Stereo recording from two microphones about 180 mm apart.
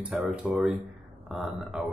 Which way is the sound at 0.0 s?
10° right (ahead or behind).